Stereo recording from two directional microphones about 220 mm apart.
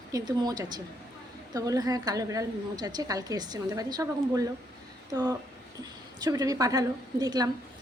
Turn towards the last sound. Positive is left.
turn(degrees=-15)  # may be behind; listen again after turning